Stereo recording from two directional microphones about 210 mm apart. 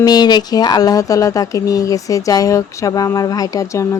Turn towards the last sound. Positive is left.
turn(degrees=15)  # may be behind; listen again after turning